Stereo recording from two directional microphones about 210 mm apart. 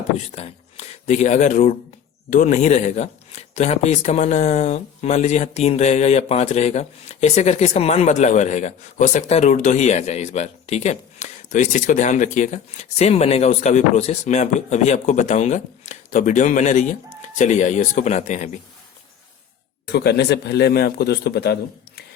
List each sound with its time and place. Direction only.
0.3 s speech: 30° left (ahead or behind)
19.9 s a man's voice: 50° left (ahead or behind)